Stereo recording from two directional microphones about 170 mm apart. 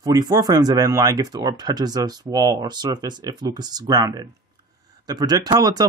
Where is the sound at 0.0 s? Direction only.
20° right (ahead or behind).